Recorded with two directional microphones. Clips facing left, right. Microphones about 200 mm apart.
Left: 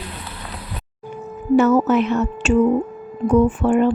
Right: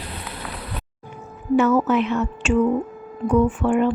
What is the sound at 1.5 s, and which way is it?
Speech, 40° left (ahead or behind).